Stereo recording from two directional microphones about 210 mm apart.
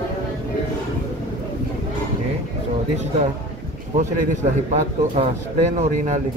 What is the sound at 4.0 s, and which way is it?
A man's voice, 35° right (ahead or behind).